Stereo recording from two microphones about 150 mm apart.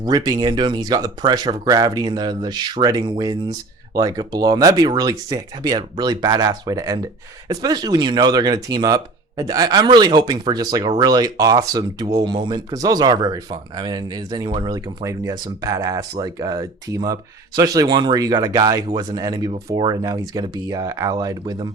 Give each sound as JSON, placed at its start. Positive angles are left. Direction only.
{"t": 0.0, "sound": "speech", "side_deg": -25}